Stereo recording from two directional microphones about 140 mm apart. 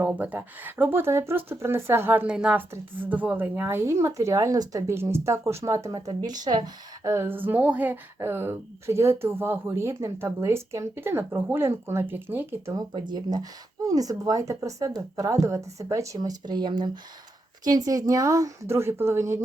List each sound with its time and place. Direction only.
0.0 s a woman's voice: 10° right (ahead or behind)
12.7 s speech: 30° right (ahead or behind)